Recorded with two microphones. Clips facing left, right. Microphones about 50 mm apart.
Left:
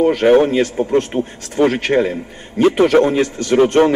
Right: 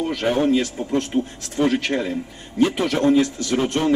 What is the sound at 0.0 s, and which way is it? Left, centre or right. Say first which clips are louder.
Speech: left 9 dB; left.